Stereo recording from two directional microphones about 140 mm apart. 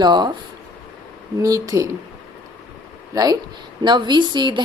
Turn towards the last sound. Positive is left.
turn(degrees=-35)  # may be behind; listen again after turning